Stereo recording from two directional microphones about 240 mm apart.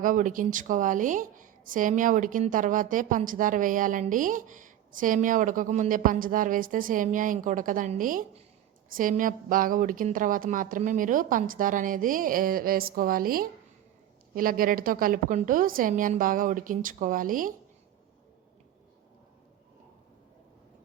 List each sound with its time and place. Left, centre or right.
0.0 s a woman's voice: right